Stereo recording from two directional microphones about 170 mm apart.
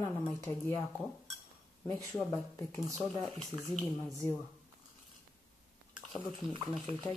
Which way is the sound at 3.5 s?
25° right (ahead or behind).